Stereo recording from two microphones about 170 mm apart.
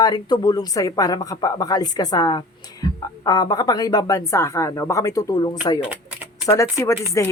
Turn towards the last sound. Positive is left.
turn(degrees=15)  # may be behind; listen again after turning